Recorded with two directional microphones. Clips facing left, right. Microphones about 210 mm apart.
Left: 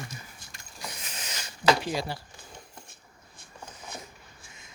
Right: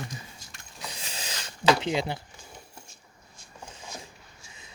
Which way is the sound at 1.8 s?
20° right (ahead or behind).